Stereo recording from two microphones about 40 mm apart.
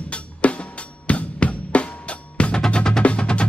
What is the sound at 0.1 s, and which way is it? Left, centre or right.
Music, left.